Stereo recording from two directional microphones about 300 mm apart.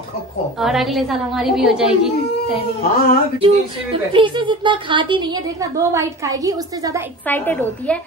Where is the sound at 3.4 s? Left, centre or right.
Centre.